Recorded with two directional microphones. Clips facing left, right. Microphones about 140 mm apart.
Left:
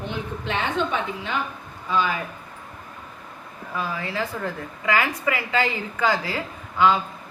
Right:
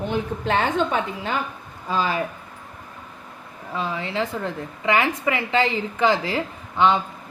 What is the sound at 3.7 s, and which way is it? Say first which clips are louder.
A woman's voice: right 2 dB; 25° right (ahead or behind).